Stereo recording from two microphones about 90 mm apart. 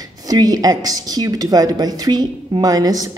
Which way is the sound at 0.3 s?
45° right (ahead or behind).